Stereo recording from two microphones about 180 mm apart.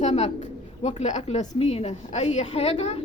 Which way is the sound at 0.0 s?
40° left (ahead or behind).